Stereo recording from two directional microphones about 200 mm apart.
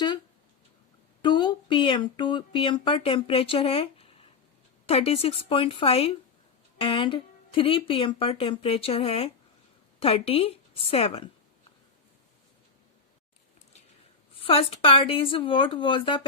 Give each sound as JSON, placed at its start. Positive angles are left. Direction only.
{"t": 1.2, "sound": "speech", "side_deg": 25}
{"t": 14.4, "sound": "speech", "side_deg": 30}